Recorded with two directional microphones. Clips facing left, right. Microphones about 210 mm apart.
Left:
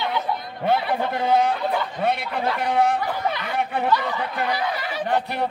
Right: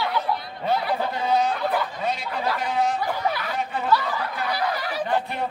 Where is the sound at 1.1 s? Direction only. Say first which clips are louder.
Left 4 dB; 55° left (ahead or behind).